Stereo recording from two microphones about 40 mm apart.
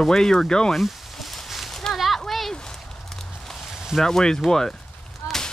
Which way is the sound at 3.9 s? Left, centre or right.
Centre.